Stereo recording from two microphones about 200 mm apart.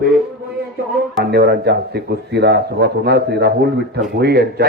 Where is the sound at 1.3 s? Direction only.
55° right (ahead or behind).